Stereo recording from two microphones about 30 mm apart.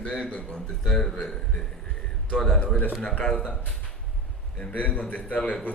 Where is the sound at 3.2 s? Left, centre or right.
Left.